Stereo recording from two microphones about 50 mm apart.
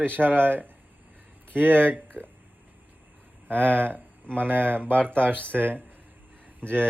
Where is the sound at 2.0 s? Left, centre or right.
Right.